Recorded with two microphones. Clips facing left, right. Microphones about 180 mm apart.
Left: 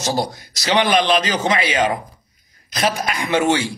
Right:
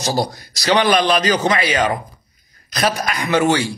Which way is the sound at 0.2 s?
20° left (ahead or behind).